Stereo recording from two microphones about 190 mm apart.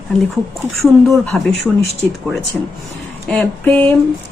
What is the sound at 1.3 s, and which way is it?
Speech, centre (ahead or behind).